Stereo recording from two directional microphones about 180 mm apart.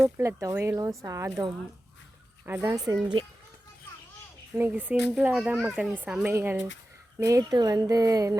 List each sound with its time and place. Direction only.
0.0 s speech: 15° right (ahead or behind)
2.5 s speech: 15° right (ahead or behind)
4.5 s speech: 10° right (ahead or behind)